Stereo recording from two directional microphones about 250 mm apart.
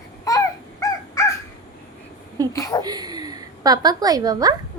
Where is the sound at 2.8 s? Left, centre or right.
Centre.